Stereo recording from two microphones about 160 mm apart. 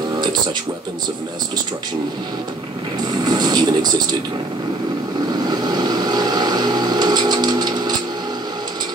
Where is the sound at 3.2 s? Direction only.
25° right (ahead or behind).